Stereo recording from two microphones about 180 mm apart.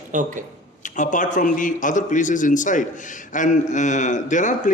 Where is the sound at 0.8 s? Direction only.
45° left (ahead or behind).